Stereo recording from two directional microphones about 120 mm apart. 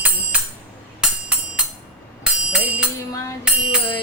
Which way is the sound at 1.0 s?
10° right (ahead or behind).